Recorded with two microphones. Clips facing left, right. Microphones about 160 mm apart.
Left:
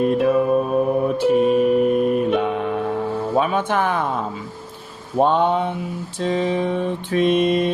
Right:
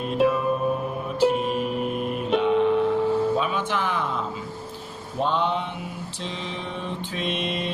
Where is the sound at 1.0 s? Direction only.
55° left (ahead or behind).